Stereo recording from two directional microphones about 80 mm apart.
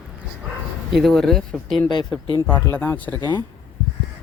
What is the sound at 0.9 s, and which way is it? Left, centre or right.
Speech, centre.